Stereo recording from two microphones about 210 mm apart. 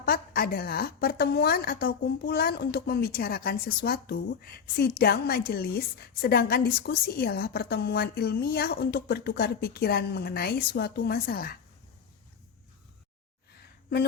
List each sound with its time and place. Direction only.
0.0 s a woman's voice: 45° left (ahead or behind)